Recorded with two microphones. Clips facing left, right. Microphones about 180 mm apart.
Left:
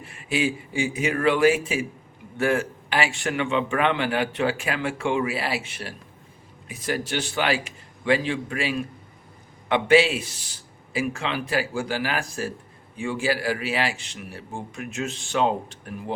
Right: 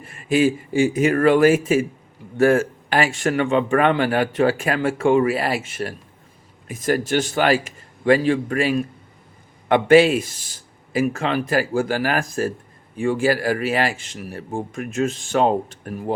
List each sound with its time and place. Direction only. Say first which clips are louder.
0.0 s speech: right 7 dB; 45° right (ahead or behind)